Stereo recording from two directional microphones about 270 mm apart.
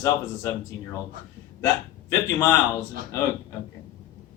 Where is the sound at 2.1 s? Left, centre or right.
Centre.